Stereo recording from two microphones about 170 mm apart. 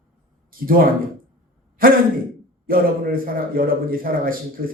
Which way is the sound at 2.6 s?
60° right (ahead or behind).